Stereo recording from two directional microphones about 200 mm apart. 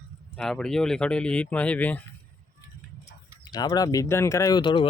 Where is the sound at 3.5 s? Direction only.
20° left (ahead or behind).